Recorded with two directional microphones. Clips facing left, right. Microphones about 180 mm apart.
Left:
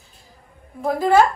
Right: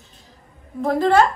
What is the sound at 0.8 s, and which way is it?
Speech, centre (ahead or behind).